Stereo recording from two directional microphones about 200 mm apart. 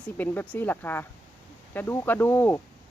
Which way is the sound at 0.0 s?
10° left (ahead or behind).